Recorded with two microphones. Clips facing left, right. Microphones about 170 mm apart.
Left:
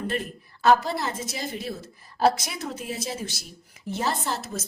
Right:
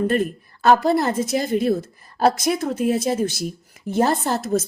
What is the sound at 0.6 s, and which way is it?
A woman's voice, 50° right (ahead or behind).